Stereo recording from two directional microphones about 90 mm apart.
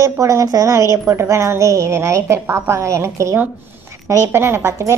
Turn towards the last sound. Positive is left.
turn(degrees=-30)  # may be behind; listen again after turning